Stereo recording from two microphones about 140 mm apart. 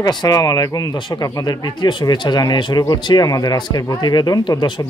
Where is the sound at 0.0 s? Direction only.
25° left (ahead or behind).